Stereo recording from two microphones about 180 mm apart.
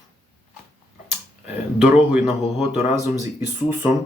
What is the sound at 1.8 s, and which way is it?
Speech, 5° right (ahead or behind).